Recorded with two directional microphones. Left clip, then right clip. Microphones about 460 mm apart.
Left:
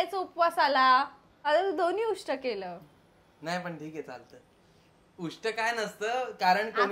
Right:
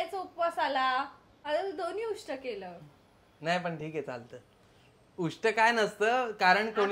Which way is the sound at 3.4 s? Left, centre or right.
Right.